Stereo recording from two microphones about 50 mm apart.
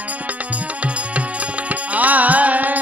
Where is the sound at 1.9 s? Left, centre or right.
Right.